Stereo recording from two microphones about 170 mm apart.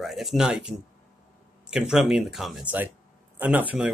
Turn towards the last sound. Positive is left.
turn(degrees=-10)  # may be behind; listen again after turning